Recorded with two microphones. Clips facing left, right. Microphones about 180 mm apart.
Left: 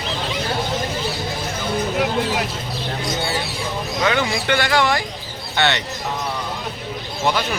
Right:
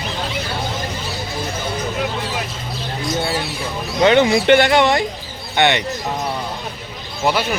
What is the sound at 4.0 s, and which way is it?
Speech, 25° right (ahead or behind).